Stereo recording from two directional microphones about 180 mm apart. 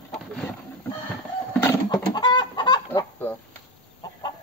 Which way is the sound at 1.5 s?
15° left (ahead or behind).